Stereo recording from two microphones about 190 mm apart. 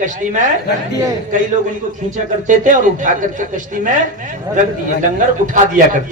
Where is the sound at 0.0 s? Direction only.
40° right (ahead or behind).